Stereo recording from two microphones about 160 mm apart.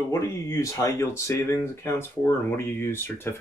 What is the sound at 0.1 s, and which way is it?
Speech, 20° left (ahead or behind).